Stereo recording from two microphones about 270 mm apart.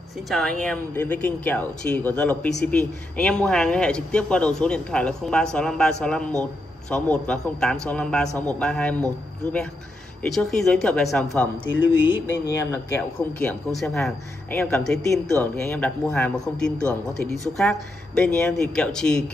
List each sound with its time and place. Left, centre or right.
0.3 s speech: centre
10.2 s speech: centre